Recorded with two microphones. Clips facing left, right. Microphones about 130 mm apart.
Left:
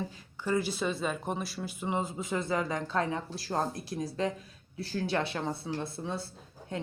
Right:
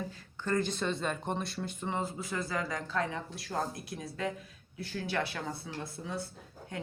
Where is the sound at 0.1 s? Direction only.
15° left (ahead or behind).